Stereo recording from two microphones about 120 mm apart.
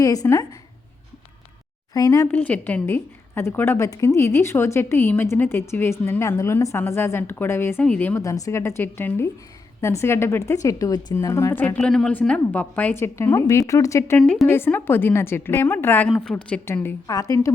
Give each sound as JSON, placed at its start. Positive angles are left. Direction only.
{"t": 0.0, "sound": "a woman's voice", "side_deg": 30}
{"t": 1.9, "sound": "speech", "side_deg": 30}
{"t": 2.3, "sound": "a woman's voice", "side_deg": 15}
{"t": 8.2, "sound": "a woman's voice", "side_deg": 25}
{"t": 11.8, "sound": "a woman's voice", "side_deg": 5}
{"t": 14.2, "sound": "a woman's voice", "side_deg": 5}
{"t": 14.4, "sound": "a woman's voice", "side_deg": 15}
{"t": 16.0, "sound": "a woman's voice", "side_deg": 5}
{"t": 16.6, "sound": "a woman's voice", "side_deg": 20}